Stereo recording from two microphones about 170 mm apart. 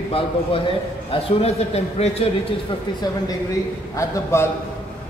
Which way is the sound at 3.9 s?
15° left (ahead or behind).